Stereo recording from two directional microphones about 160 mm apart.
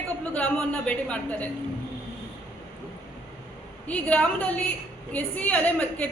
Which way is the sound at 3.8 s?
10° left (ahead or behind).